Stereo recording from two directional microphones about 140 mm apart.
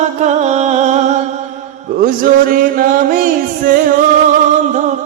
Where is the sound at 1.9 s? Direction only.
75° right (ahead or behind).